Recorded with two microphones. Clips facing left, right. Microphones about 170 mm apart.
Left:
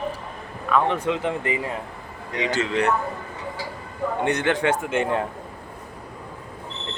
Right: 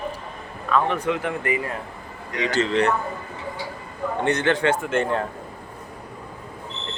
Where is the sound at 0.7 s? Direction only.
20° left (ahead or behind).